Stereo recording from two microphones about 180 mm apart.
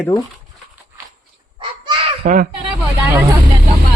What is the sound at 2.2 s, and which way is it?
Speech, 45° right (ahead or behind).